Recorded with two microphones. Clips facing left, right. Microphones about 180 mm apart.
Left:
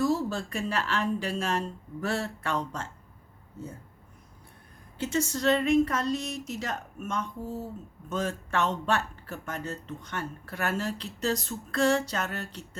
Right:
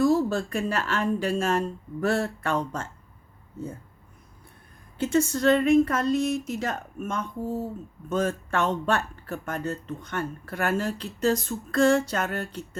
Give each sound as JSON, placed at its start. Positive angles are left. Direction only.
{"t": 0.3, "sound": "speech", "side_deg": -50}
{"t": 4.9, "sound": "speech", "side_deg": -55}